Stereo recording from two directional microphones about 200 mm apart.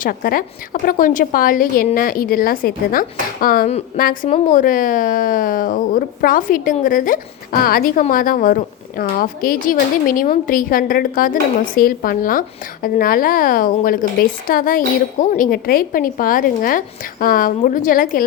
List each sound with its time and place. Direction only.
0.0 s a woman's voice: 45° left (ahead or behind)